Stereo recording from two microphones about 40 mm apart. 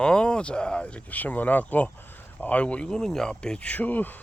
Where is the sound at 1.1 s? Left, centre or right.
Left.